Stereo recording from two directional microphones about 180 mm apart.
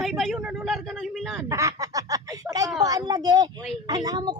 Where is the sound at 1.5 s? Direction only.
20° right (ahead or behind).